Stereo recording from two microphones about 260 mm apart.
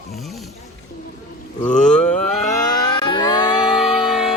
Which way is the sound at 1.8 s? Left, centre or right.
Centre.